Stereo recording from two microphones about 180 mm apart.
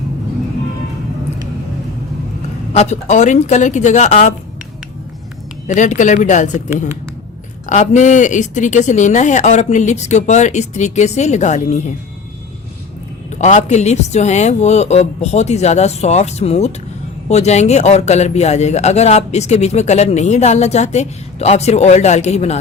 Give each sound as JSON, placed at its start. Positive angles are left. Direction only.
{"t": 2.7, "sound": "a man's voice", "side_deg": 40}
{"t": 5.6, "sound": "a man's voice", "side_deg": 45}
{"t": 13.4, "sound": "a man's voice", "side_deg": 40}